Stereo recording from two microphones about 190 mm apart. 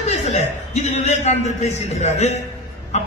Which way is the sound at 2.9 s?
35° left (ahead or behind).